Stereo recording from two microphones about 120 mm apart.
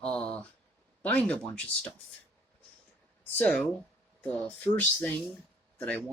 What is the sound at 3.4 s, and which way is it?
Speech, 10° left (ahead or behind).